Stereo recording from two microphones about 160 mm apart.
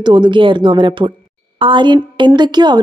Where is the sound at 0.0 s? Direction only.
30° right (ahead or behind).